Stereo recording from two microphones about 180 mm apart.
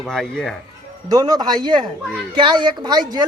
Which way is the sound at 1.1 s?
20° right (ahead or behind).